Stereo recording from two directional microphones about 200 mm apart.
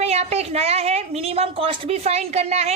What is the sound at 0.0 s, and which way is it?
A woman's voice, 30° right (ahead or behind).